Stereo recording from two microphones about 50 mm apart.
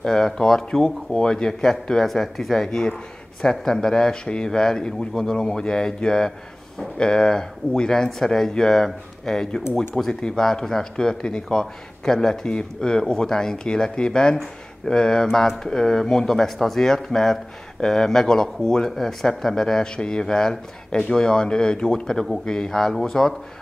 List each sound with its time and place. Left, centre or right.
0.0 s speech: centre